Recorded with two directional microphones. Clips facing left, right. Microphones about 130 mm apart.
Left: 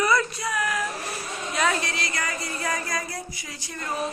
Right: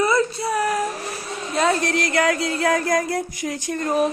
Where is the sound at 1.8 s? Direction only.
55° right (ahead or behind).